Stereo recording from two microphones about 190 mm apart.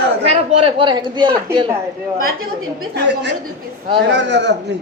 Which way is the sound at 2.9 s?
65° right (ahead or behind).